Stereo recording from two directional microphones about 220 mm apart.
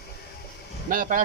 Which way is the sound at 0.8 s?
40° right (ahead or behind).